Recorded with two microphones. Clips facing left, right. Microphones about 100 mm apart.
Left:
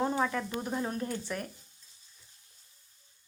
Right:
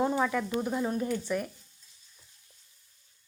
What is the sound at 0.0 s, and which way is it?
Sizzle, centre (ahead or behind).